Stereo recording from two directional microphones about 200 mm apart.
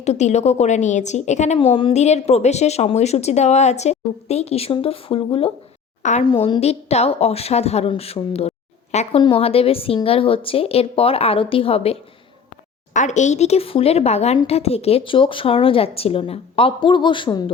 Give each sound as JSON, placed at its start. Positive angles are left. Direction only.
{"t": 0.0, "sound": "a woman's voice", "side_deg": 35}
{"t": 6.2, "sound": "a woman's voice", "side_deg": 25}